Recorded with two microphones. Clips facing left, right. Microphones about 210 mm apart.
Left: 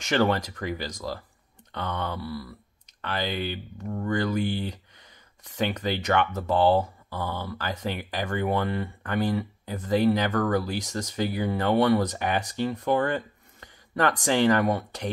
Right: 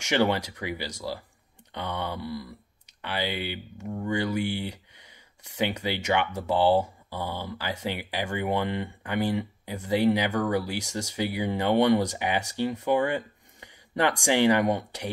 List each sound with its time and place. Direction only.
0.1 s speech: 15° right (ahead or behind)